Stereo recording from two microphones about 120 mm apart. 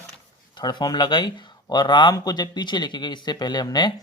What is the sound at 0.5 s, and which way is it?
Speech, 40° left (ahead or behind).